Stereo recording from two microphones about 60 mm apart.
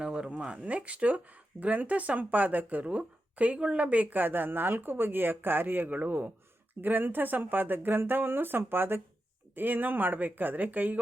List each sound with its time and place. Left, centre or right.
0.0 s speech: centre